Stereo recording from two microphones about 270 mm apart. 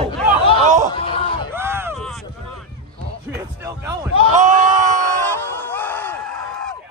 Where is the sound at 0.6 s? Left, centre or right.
Right.